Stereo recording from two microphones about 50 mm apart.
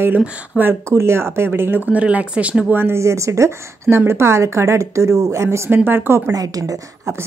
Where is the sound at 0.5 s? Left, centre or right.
Right.